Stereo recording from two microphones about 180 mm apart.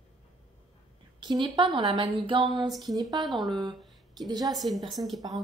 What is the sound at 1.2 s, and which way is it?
A woman's voice, 25° right (ahead or behind).